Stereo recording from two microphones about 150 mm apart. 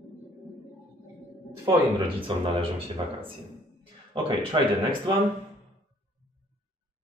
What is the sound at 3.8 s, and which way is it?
Speech, 35° right (ahead or behind).